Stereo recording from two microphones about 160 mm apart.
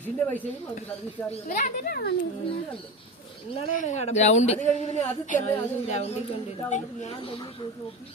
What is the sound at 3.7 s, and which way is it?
A woman's voice, 45° left (ahead or behind).